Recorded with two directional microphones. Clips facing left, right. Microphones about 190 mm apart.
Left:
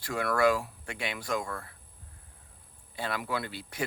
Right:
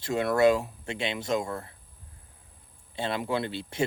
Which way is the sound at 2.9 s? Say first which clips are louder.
Right 4 dB; 25° right (ahead or behind).